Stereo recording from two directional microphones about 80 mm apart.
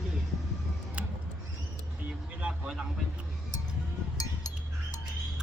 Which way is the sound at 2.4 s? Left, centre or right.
Centre.